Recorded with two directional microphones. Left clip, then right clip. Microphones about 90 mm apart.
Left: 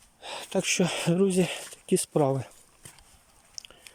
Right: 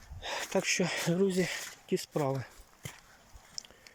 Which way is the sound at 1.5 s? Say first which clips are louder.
Left 6 dB; 45° left (ahead or behind).